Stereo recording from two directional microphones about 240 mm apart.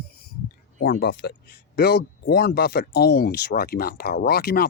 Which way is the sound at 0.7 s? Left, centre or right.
Left.